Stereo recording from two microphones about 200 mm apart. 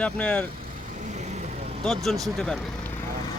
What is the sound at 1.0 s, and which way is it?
Vehicle, 35° right (ahead or behind).